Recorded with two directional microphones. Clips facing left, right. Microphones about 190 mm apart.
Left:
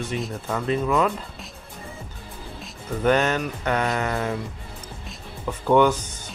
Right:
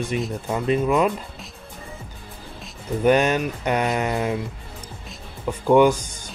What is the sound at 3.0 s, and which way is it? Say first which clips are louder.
Speech: right 3 dB; 15° right (ahead or behind).